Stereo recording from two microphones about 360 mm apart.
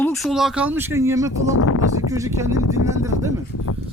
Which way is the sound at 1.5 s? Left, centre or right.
Left.